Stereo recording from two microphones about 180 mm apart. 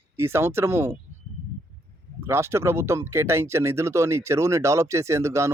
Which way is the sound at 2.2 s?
15° right (ahead or behind).